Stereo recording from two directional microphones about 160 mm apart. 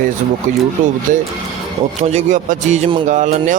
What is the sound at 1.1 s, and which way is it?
Speech, 55° right (ahead or behind).